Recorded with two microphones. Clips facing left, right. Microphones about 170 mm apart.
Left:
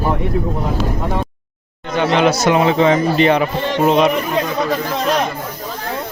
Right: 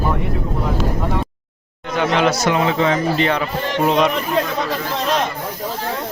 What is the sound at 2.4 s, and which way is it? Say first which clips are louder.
Speech: left 4 dB; 20° left (ahead or behind).